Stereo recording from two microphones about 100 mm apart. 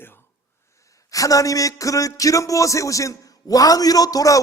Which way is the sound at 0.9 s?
35° left (ahead or behind).